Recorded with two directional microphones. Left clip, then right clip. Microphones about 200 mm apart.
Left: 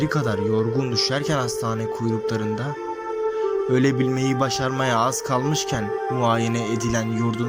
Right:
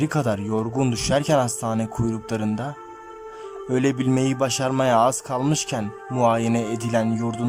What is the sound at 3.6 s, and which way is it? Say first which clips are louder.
Speech: left 2 dB; 5° right (ahead or behind).